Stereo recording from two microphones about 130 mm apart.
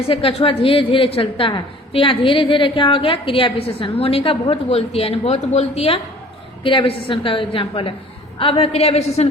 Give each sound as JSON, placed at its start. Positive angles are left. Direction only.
{"t": 0.1, "sound": "a woman's voice", "side_deg": 45}
{"t": 6.7, "sound": "a woman's voice", "side_deg": 40}